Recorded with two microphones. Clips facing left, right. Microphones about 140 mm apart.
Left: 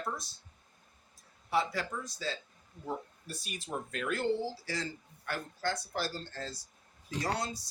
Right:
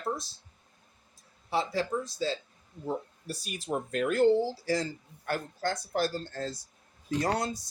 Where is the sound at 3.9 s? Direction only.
40° right (ahead or behind).